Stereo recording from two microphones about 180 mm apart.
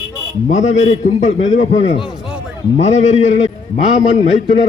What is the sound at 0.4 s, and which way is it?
A man's voice, 40° left (ahead or behind).